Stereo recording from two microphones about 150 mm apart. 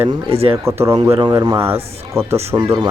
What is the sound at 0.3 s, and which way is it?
Speech, 40° right (ahead or behind).